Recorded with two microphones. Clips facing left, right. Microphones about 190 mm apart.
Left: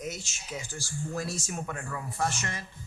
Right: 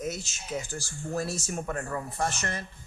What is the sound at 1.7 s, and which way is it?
Speech, 40° right (ahead or behind).